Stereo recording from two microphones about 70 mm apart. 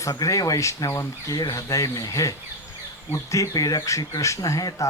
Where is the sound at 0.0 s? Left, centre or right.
Left.